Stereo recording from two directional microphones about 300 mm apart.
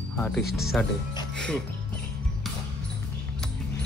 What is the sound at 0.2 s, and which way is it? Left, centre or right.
Speech, centre.